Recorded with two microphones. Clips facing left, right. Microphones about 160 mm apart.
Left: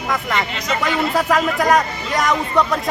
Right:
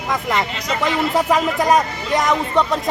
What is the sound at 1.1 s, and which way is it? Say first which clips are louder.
Speech: even; 20° right (ahead or behind).